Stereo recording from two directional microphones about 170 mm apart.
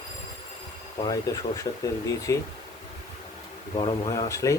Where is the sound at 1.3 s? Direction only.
20° left (ahead or behind).